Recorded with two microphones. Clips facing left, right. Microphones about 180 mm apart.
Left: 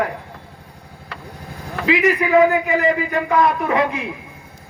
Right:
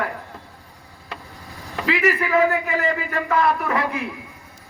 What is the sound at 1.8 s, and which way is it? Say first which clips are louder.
A man's voice: left 4 dB; 15° left (ahead or behind).